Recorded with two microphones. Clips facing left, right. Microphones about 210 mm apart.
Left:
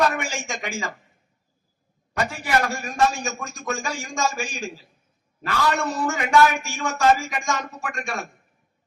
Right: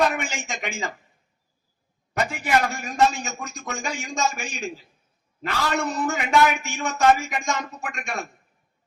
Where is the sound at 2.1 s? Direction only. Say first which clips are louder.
Right 1 dB; 20° right (ahead or behind).